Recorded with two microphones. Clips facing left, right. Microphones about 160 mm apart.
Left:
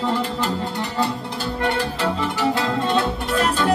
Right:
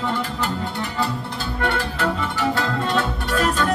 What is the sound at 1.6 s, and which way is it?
Music, 35° left (ahead or behind).